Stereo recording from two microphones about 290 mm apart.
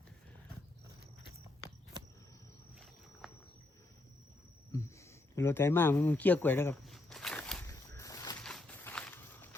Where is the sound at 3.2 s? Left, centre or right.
Centre.